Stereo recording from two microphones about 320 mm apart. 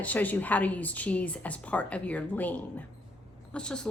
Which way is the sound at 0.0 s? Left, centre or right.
Centre.